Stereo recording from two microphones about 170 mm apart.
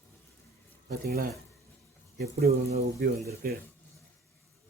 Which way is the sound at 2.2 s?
65° right (ahead or behind).